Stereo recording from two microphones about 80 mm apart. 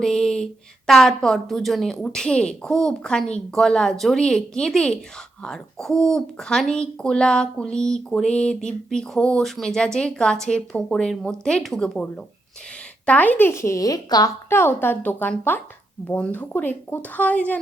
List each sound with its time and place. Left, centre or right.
0.0 s a sound: centre
0.9 s a woman's voice: centre
2.0 s speech: centre
13.5 s a woman's voice: left
14.5 s speech: left